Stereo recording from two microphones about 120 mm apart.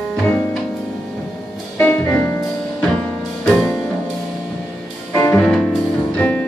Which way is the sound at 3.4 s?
5° left (ahead or behind).